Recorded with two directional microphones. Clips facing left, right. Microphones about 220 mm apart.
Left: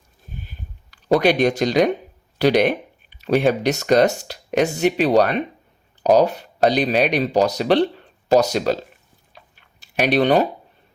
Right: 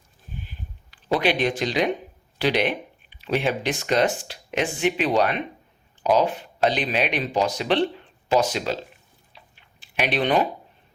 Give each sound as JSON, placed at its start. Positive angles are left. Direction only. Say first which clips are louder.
{"t": 0.4, "sound": "a sound", "louder": "left 1 dB", "side_deg": 45}
{"t": 2.4, "sound": "speech", "louder": "left 6 dB", "side_deg": 45}
{"t": 9.3, "sound": "tick-tock", "louder": "left 4 dB", "side_deg": 45}